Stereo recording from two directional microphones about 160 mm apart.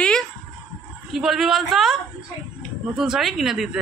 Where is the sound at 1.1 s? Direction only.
Centre (ahead or behind).